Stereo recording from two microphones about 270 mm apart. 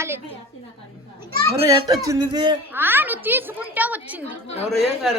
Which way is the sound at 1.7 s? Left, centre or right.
Centre.